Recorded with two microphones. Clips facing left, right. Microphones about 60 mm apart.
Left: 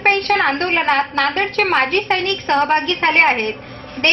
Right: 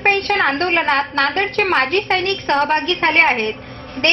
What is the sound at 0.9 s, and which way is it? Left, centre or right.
Speech, centre.